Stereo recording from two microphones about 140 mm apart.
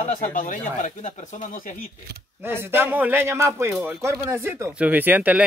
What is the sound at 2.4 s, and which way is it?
Speech, 15° right (ahead or behind).